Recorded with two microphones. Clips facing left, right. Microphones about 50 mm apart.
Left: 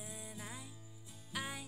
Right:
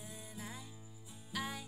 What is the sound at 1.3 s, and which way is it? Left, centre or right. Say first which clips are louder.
Music: right 1 dB; centre.